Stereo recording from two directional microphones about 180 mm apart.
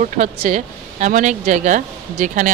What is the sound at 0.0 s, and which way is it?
Speech, 40° right (ahead or behind).